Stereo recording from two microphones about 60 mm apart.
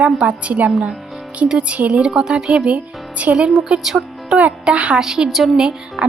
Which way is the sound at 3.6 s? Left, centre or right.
Centre.